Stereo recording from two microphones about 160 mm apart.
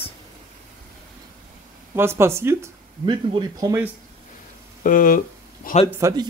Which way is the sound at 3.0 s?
30° right (ahead or behind).